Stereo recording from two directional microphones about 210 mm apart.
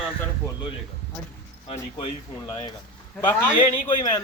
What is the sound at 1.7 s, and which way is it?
Speech, 25° left (ahead or behind).